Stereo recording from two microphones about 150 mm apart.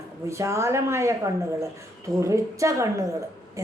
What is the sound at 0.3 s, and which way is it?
Speech, 20° right (ahead or behind).